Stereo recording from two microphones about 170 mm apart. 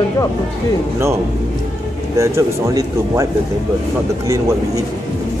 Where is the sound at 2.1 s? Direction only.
15° right (ahead or behind).